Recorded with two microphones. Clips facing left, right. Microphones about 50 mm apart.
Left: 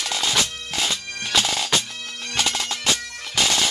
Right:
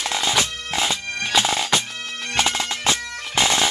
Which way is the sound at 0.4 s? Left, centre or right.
Right.